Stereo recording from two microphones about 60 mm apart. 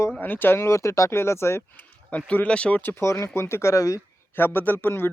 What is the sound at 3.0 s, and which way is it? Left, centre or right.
Speech, left.